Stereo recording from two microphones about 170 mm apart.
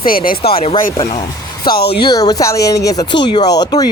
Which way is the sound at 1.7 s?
75° left (ahead or behind).